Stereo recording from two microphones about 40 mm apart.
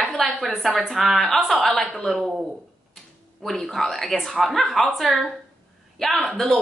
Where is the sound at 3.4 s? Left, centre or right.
Centre.